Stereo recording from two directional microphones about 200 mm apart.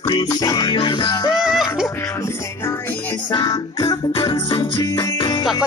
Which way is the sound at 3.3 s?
20° left (ahead or behind).